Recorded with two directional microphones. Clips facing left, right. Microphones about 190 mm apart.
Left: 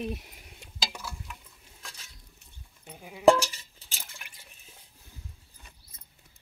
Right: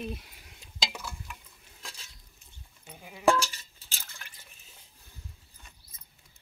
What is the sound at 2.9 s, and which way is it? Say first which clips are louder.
Cowbell: left 5 dB; 10° left (ahead or behind).